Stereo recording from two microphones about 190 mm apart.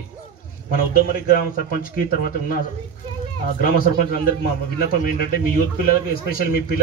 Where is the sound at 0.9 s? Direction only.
50° left (ahead or behind).